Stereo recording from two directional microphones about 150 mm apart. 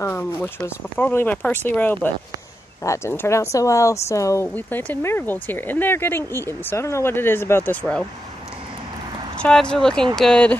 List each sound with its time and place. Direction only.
0.0 s speech: 15° left (ahead or behind)
9.4 s speech: 5° left (ahead or behind)